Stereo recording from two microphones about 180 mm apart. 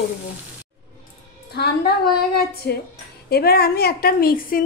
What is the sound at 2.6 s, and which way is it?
A woman's voice, 65° left (ahead or behind).